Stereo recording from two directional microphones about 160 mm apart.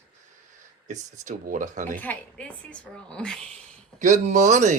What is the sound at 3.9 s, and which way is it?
Speech, 50° right (ahead or behind).